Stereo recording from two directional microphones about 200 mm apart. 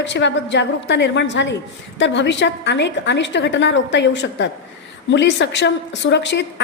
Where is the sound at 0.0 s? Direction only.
65° left (ahead or behind).